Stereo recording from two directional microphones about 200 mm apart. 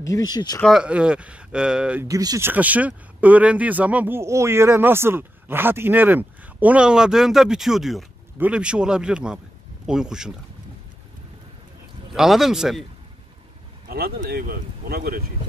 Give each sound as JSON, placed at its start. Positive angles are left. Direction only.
{"t": 0.0, "sound": "speech", "side_deg": 20}
{"t": 0.6, "sound": "speech", "side_deg": 0}
{"t": 2.0, "sound": "speech", "side_deg": -15}
{"t": 12.1, "sound": "speech", "side_deg": 0}
{"t": 13.8, "sound": "speech", "side_deg": -50}